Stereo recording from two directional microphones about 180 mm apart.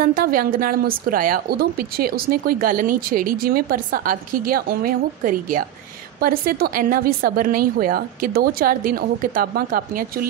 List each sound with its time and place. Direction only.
0.0 s speech: 50° right (ahead or behind)